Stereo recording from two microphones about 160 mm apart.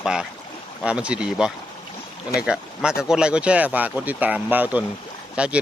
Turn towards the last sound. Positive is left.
turn(degrees=-5)  # may be behind; listen again after turning